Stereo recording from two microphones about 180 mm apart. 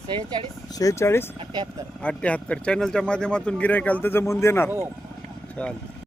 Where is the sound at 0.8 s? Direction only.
15° left (ahead or behind).